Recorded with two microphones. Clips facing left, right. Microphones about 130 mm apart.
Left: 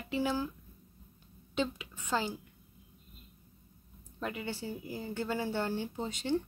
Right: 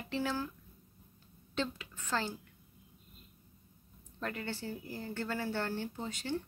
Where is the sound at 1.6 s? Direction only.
15° left (ahead or behind).